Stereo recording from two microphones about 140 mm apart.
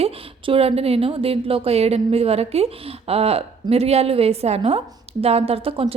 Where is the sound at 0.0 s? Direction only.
45° right (ahead or behind).